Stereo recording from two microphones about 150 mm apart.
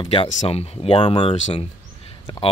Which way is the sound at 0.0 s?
35° left (ahead or behind).